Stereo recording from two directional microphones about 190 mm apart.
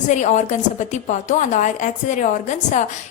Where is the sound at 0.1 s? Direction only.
40° left (ahead or behind).